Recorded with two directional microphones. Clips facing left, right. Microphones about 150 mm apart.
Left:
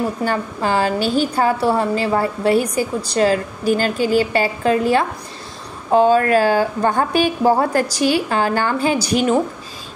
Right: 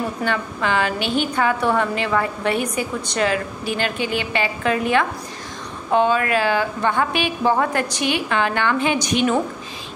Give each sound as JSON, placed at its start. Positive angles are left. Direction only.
{"t": 0.2, "sound": "a woman's voice", "side_deg": 35}